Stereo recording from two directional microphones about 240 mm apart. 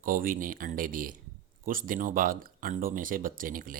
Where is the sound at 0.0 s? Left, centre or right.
Right.